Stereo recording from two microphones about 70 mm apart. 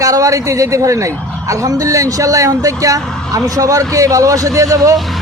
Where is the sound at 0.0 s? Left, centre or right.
Right.